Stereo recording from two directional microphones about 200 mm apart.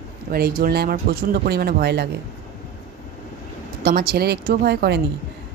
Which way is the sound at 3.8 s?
50° right (ahead or behind).